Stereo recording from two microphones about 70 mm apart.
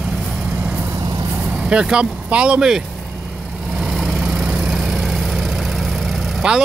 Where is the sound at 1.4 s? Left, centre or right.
Centre.